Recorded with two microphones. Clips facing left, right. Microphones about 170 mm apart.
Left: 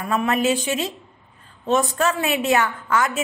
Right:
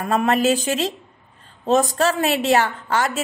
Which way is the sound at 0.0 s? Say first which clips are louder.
Right 2 dB; 45° right (ahead or behind).